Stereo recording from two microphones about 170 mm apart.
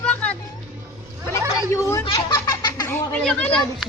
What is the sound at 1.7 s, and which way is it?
Speech, 15° left (ahead or behind).